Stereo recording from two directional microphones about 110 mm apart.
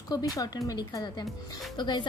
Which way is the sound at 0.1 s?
35° left (ahead or behind).